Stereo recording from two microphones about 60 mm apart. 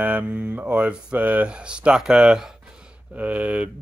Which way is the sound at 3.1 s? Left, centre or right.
Right.